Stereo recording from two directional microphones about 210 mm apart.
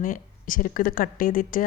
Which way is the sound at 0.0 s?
40° left (ahead or behind).